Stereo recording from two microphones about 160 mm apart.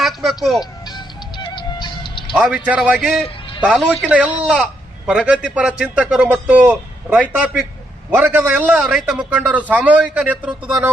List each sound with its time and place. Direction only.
0.0 s speech: centre (ahead or behind)
0.6 s music: 25° left (ahead or behind)
2.3 s a man's voice: 5° right (ahead or behind)